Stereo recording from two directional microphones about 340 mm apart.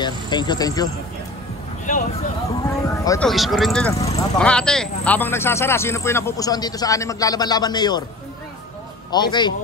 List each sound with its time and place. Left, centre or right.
0.0 s a man's voice: centre
2.6 s speech: centre
4.0 s a man's voice: centre
4.4 s a man's voice: centre
9.1 s a man's voice: centre